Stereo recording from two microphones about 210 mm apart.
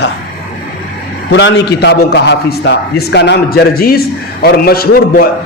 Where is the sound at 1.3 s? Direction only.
55° left (ahead or behind).